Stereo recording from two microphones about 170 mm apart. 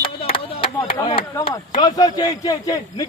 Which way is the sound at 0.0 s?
30° left (ahead or behind).